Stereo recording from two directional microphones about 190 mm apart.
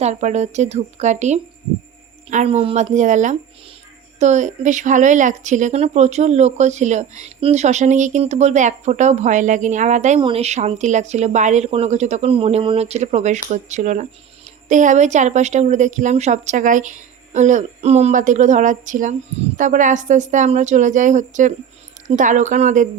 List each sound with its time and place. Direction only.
0.0 s speech: 35° right (ahead or behind)
10.2 s speech: 30° right (ahead or behind)